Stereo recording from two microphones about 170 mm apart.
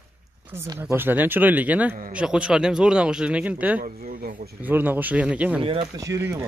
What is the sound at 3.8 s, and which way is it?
Speech, 55° right (ahead or behind).